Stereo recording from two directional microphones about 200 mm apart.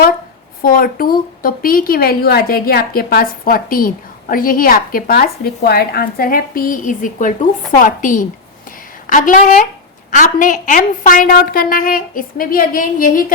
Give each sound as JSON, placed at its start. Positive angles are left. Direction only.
{"t": 0.6, "sound": "a woman's voice", "side_deg": 45}